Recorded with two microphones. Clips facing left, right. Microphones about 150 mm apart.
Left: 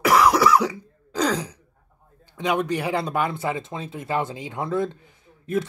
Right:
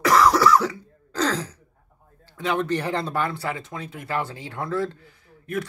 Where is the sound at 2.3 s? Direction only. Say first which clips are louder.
Left 1 dB; 15° left (ahead or behind).